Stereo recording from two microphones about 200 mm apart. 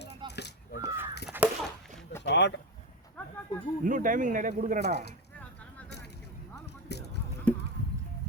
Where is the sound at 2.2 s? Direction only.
60° left (ahead or behind).